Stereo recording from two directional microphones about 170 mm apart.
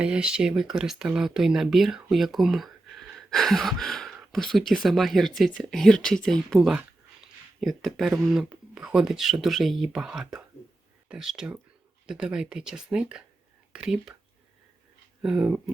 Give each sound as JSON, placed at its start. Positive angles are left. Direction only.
{"t": 0.0, "sound": "speech", "side_deg": -5}
{"t": 15.2, "sound": "speech", "side_deg": -5}